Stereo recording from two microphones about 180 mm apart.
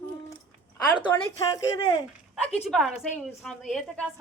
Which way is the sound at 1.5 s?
20° left (ahead or behind).